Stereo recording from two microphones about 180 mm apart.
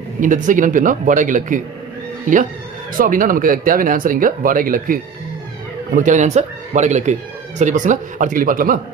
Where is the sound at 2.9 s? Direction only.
50° right (ahead or behind).